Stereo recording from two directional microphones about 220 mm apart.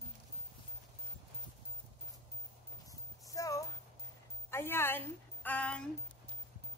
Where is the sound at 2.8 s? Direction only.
15° left (ahead or behind).